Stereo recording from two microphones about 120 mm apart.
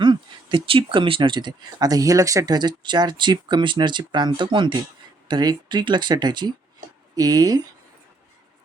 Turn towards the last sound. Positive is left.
turn(degrees=-30)  # may be behind; listen again after turning